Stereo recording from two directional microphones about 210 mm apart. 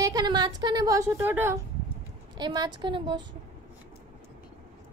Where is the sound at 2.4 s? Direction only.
20° right (ahead or behind).